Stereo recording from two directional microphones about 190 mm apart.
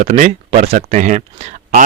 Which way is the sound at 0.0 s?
35° right (ahead or behind).